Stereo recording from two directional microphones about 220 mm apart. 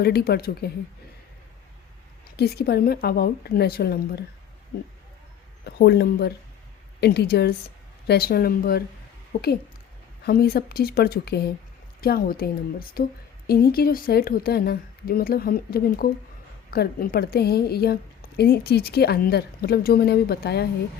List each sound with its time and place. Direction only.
0.0 s speech: 45° left (ahead or behind)
2.3 s speech: 45° left (ahead or behind)
5.6 s speech: 50° left (ahead or behind)
10.2 s speech: 45° left (ahead or behind)